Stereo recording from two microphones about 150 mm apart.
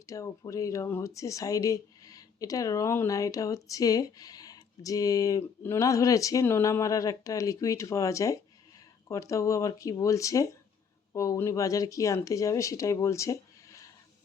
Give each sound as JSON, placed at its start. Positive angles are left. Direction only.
{"t": 0.0, "sound": "speech", "side_deg": 20}